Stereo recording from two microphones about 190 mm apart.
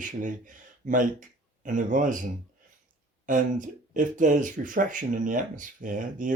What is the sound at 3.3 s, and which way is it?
Speech, 45° right (ahead or behind).